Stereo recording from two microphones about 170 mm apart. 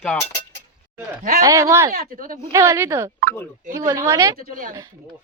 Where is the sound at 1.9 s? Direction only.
55° right (ahead or behind).